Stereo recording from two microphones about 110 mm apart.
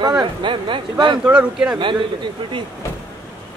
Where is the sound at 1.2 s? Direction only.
10° right (ahead or behind).